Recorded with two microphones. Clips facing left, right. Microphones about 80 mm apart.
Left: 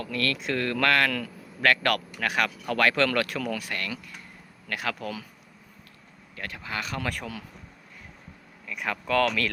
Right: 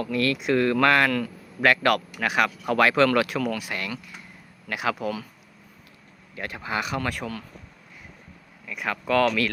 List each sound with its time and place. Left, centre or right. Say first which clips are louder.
0.0 s a man's voice: right 5 dB; centre
6.3 s a man's voice: right 5 dB; right
7.0 s speech: right 3 dB; centre
8.6 s speech: right 3 dB; centre